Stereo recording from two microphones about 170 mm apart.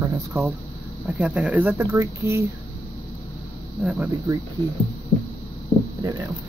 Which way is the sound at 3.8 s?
10° right (ahead or behind).